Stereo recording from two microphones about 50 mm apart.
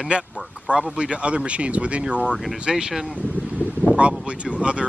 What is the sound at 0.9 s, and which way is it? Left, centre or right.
Speech, right.